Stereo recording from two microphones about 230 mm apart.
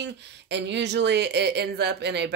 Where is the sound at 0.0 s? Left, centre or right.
Right.